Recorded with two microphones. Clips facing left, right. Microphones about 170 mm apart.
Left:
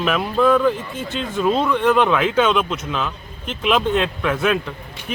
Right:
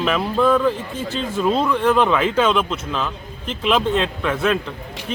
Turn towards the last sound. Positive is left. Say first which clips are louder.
# even
turn(degrees=0)  # may be behind; listen again after turning